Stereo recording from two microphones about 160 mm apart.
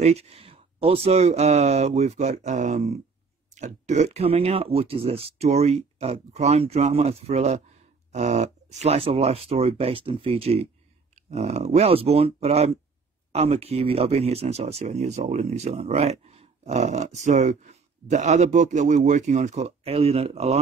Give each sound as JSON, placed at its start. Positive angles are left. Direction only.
{"t": 0.0, "sound": "speech", "side_deg": -40}